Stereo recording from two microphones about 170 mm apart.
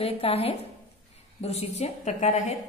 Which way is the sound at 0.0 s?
35° left (ahead or behind).